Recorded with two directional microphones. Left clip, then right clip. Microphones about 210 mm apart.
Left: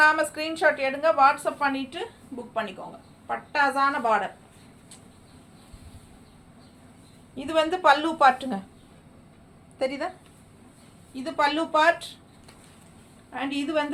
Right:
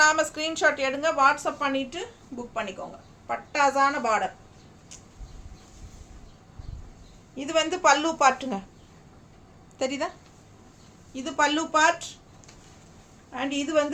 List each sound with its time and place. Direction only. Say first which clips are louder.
0.0 s a woman's voice: left 1 dB; 25° right (ahead or behind)
3.2 s a woman's voice: even; 15° right (ahead or behind)
7.3 s a woman's voice: left 1 dB; 15° right (ahead or behind)
9.7 s a woman's voice: even; 25° right (ahead or behind)
11.1 s a woman's voice: even; 15° right (ahead or behind)
13.3 s a woman's voice: right 2 dB; 15° right (ahead or behind)